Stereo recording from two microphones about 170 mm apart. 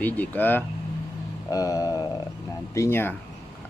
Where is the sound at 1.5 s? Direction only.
20° left (ahead or behind).